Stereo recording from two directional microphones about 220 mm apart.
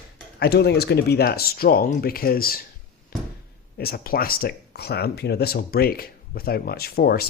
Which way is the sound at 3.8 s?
45° left (ahead or behind).